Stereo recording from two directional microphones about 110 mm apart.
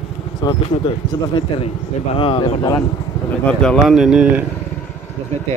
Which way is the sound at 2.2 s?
50° left (ahead or behind).